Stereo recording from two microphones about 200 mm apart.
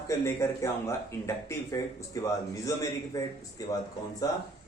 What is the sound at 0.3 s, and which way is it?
Speech, 15° left (ahead or behind).